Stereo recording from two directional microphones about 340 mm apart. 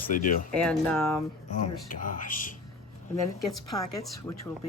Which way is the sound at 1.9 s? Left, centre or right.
Left.